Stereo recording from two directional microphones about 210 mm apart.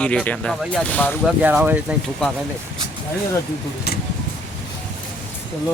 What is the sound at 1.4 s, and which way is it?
Speech, 10° right (ahead or behind).